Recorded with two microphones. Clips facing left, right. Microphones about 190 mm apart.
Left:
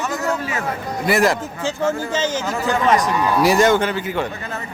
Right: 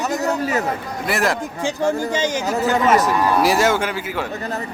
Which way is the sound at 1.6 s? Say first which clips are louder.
Right 1 dB; 10° right (ahead or behind).